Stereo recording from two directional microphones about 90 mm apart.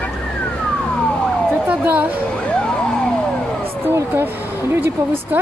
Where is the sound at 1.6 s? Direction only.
20° right (ahead or behind).